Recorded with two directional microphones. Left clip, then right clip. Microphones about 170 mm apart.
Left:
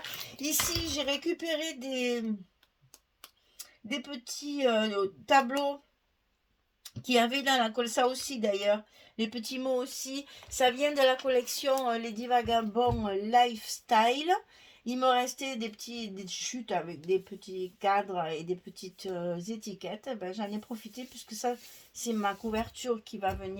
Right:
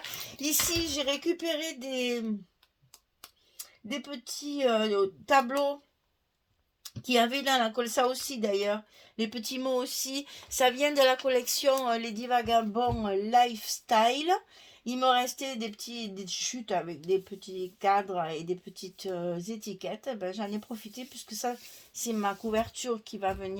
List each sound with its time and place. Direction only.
0.9 s speech: 40° right (ahead or behind)
4.0 s speech: 40° right (ahead or behind)
6.8 s speech: 40° right (ahead or behind)